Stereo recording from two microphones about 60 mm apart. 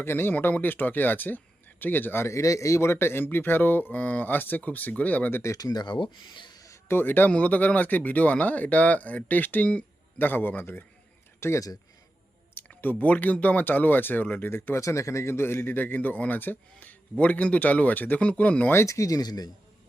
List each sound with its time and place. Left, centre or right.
0.0 s a man's voice: left
2.3 s a man's voice: left
3.9 s speech: left
5.3 s speech: left
5.5 s speech: left
6.8 s a man's voice: left
11.3 s speech: left
12.8 s a man's voice: left
14.8 s a man's voice: left
18.9 s speech: left